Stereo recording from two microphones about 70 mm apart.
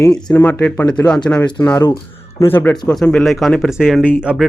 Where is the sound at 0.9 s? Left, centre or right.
Centre.